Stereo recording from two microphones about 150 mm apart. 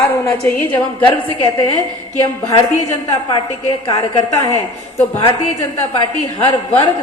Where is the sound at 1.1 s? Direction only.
35° left (ahead or behind).